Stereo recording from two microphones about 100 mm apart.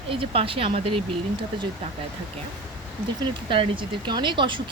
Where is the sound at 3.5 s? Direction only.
55° right (ahead or behind).